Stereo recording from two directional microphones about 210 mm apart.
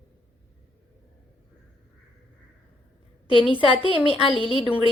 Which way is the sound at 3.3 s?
25° left (ahead or behind).